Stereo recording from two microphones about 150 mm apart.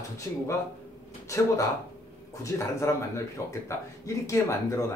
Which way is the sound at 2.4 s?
20° left (ahead or behind).